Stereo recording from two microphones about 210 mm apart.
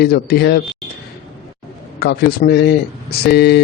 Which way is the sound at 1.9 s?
50° left (ahead or behind).